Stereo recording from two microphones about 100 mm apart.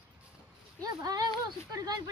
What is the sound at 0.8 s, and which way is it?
Speech, 40° right (ahead or behind).